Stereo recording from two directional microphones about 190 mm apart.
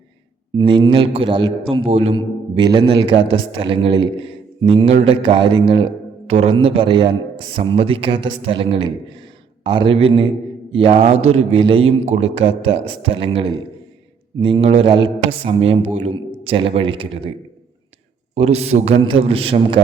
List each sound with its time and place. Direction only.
0.5 s a man's voice: 25° right (ahead or behind)
18.3 s a man's voice: 35° right (ahead or behind)